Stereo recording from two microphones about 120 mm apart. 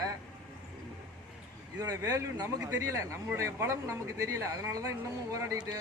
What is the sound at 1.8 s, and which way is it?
Speech, 30° right (ahead or behind).